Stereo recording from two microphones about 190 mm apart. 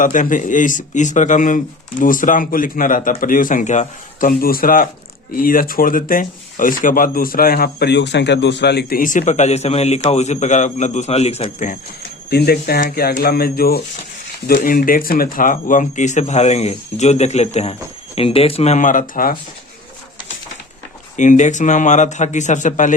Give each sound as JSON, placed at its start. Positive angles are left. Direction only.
{"t": 0.0, "sound": "speech", "side_deg": 45}
{"t": 12.3, "sound": "speech", "side_deg": 55}
{"t": 21.2, "sound": "speech", "side_deg": 40}